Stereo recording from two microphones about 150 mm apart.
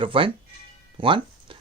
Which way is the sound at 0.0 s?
35° right (ahead or behind).